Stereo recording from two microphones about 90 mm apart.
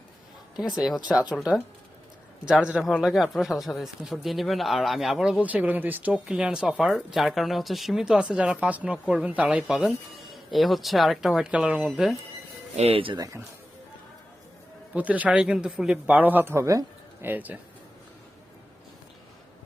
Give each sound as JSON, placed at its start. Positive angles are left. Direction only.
{"t": 1.0, "sound": "speech", "side_deg": -5}
{"t": 5.4, "sound": "speech", "side_deg": -15}
{"t": 6.2, "sound": "speech", "side_deg": -10}
{"t": 12.9, "sound": "speech", "side_deg": -85}
{"t": 14.9, "sound": "speech", "side_deg": -15}
{"t": 17.2, "sound": "speech", "side_deg": -20}